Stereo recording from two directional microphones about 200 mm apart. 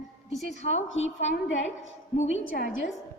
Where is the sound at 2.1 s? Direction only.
35° left (ahead or behind).